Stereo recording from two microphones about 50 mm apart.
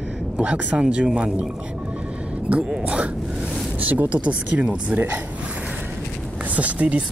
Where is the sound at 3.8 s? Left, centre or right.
Right.